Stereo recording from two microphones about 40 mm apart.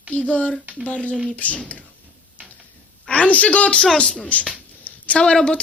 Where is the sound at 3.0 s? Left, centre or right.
Left.